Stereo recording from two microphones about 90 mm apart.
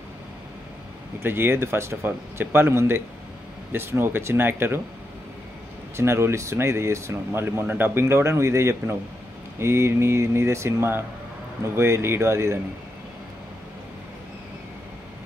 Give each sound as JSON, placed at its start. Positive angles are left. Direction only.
{"t": 1.2, "sound": "speech", "side_deg": -25}
{"t": 5.9, "sound": "speech", "side_deg": -30}